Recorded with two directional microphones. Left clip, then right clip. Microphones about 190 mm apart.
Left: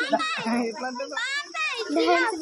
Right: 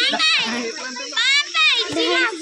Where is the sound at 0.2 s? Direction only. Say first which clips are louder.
Right 8 dB; 55° left (ahead or behind).